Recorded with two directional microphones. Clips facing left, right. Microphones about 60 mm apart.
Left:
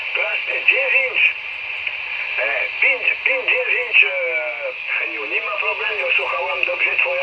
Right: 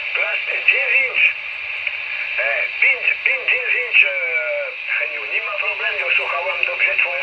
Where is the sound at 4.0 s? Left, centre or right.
Centre.